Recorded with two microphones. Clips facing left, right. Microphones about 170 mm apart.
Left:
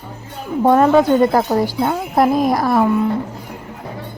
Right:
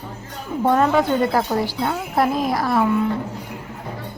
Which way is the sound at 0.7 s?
40° left (ahead or behind).